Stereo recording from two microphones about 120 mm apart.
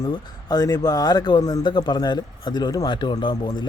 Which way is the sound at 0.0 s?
35° left (ahead or behind).